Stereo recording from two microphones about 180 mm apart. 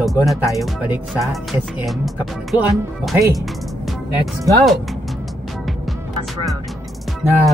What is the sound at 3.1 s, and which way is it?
Speech, 15° right (ahead or behind).